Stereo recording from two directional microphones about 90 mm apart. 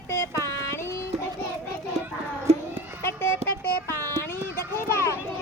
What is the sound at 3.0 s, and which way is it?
Horse, 25° left (ahead or behind).